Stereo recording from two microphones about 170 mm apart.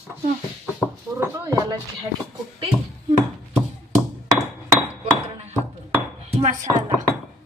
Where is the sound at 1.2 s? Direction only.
20° right (ahead or behind).